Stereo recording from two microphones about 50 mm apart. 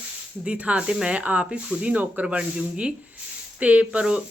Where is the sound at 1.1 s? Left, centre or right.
Right.